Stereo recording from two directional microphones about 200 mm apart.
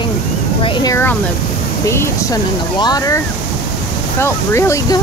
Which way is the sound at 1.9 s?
15° left (ahead or behind).